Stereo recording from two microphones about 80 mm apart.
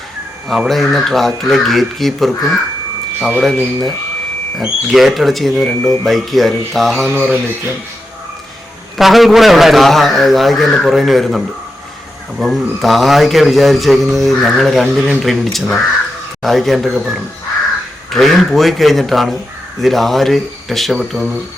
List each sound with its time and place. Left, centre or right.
0.4 s a man's voice: centre
7.1 s speech: centre
9.0 s a man's voice: centre